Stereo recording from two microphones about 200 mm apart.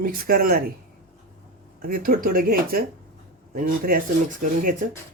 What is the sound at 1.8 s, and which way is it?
Speech, 45° right (ahead or behind).